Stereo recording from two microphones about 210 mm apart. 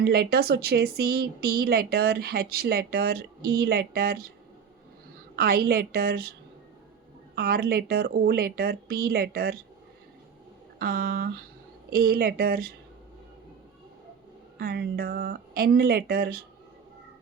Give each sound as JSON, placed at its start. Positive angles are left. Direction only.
{"t": 0.0, "sound": "speech", "side_deg": -50}
{"t": 5.4, "sound": "speech", "side_deg": -45}
{"t": 7.3, "sound": "speech", "side_deg": -45}
{"t": 10.8, "sound": "speech", "side_deg": -45}
{"t": 14.6, "sound": "speech", "side_deg": -45}